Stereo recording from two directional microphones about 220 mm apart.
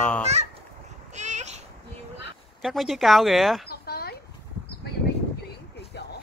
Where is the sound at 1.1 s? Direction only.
30° right (ahead or behind).